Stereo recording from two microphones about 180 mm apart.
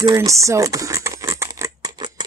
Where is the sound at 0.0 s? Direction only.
15° right (ahead or behind).